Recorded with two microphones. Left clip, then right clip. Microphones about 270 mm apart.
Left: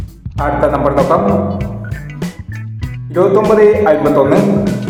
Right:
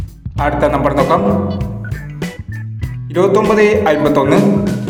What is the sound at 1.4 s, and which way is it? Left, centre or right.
Music, centre.